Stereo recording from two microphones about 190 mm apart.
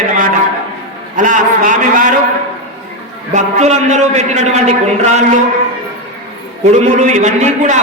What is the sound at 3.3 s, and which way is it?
A man's voice, 35° right (ahead or behind).